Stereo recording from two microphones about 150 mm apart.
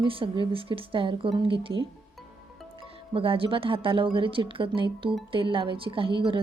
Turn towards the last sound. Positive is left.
turn(degrees=-35)  # may be behind; listen again after turning